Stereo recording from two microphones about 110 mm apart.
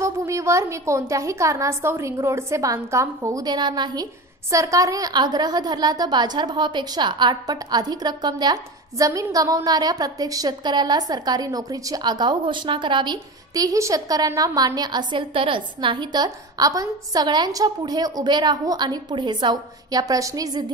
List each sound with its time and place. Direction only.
0.0 s a woman's voice: 30° right (ahead or behind)